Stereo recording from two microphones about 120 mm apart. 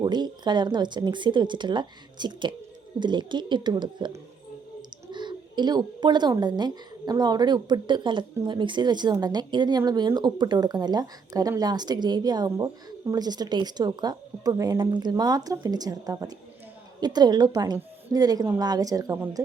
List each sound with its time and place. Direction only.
0.0 s a woman's voice: 35° right (ahead or behind)
5.1 s a woman's voice: 40° right (ahead or behind)